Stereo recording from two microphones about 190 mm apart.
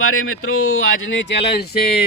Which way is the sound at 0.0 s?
90° left.